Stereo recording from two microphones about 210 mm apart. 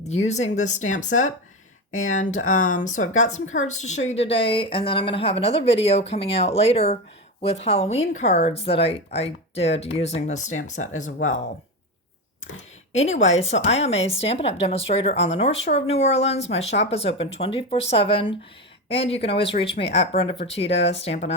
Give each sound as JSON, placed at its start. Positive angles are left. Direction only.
{"t": 0.1, "sound": "a woman's voice", "side_deg": 30}
{"t": 12.9, "sound": "a woman's voice", "side_deg": 30}